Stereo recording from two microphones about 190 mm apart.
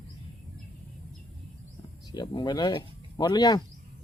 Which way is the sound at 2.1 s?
25° left (ahead or behind).